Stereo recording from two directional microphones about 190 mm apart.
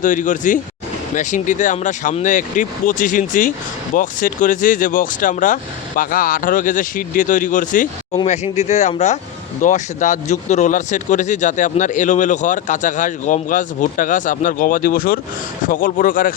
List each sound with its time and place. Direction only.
0.0 s speech: 45° left (ahead or behind)